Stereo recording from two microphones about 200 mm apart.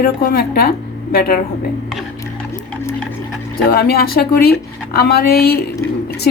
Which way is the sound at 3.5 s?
50° left (ahead or behind).